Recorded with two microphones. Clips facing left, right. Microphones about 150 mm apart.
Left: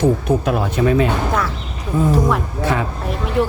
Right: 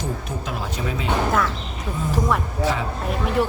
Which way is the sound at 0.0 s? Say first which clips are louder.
Left 13 dB; 60° left (ahead or behind).